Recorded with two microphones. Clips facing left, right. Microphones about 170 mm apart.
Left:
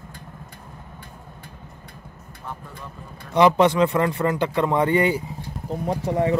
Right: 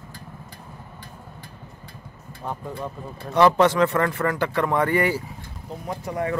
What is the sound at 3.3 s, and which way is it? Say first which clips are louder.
Speech: left 1 dB; 15° left (ahead or behind).